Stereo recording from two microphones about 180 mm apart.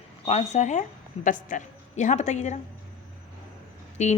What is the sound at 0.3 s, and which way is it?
Speech, 40° left (ahead or behind).